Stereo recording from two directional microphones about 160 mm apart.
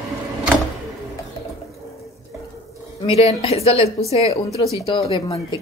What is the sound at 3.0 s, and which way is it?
A woman's voice, 40° left (ahead or behind).